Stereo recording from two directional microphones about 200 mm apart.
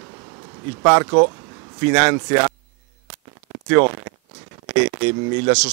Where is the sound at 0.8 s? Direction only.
15° right (ahead or behind).